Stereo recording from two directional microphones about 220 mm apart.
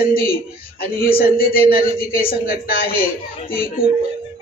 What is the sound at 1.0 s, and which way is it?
Speech, 40° left (ahead or behind).